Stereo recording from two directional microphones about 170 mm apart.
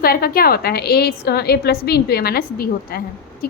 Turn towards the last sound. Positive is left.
turn(degrees=60)  # may be behind; listen again after turning